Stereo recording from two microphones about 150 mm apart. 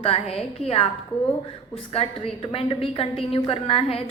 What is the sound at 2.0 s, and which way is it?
A woman's voice, 40° left (ahead or behind).